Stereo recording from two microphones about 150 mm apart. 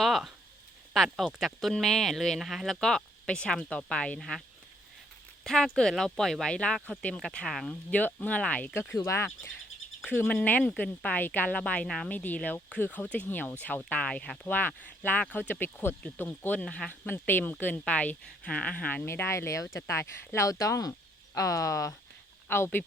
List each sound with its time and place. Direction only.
0.0 s speech: centre (ahead or behind); by 22.8 s 15° left (ahead or behind)